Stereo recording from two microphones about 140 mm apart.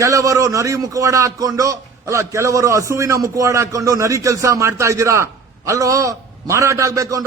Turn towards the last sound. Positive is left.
turn(degrees=-25)  # may be behind; listen again after turning